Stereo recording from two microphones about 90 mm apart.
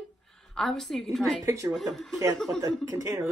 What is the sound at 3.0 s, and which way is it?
Speech, 35° right (ahead or behind).